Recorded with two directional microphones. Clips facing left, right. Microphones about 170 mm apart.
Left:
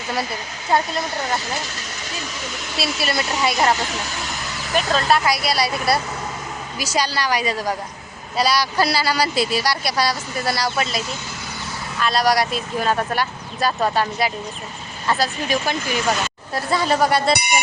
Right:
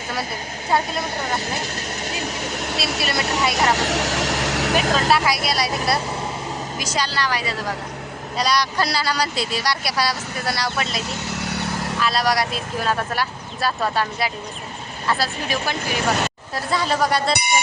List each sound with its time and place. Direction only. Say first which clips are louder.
0.8 s speech: left 1 dB; 55° right (ahead or behind)
5.0 s a woman's voice: left 1 dB; 5° right (ahead or behind)
11.1 s vehicle: right 4 dB; 75° right (ahead or behind)
11.9 s speech: left 3 dB; centre (ahead or behind)
15.8 s speech: even; 60° right (ahead or behind)
16.6 s speech: left 2 dB; centre (ahead or behind)